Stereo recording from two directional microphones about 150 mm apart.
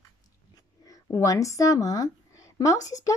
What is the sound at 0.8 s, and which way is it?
Speech, 20° left (ahead or behind).